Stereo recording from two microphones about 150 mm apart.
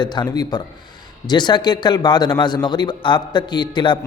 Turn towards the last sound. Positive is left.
turn(degrees=30)  # may be behind; listen again after turning